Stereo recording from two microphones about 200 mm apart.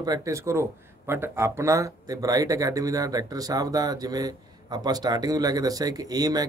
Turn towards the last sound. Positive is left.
turn(degrees=-20)  # may be behind; listen again after turning